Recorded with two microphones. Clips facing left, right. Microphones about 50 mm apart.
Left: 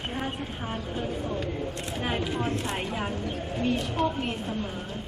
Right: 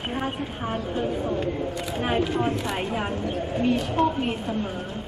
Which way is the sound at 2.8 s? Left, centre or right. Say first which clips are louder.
Right 4 dB; right.